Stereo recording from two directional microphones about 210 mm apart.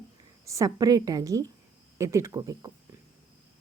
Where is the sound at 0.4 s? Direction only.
15° right (ahead or behind).